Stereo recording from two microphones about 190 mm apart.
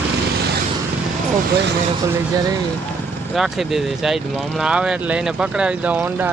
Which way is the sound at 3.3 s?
Centre (ahead or behind).